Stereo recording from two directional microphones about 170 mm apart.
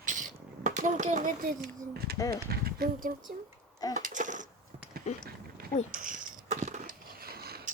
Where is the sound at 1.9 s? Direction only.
65° right (ahead or behind).